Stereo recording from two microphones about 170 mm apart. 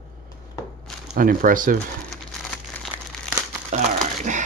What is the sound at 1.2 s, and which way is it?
Speech, 55° right (ahead or behind).